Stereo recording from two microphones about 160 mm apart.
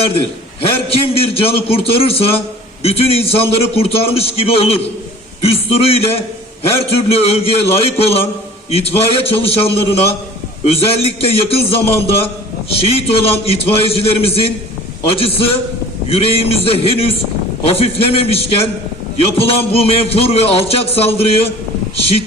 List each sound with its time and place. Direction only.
0.9 s a man's voice: 35° left (ahead or behind)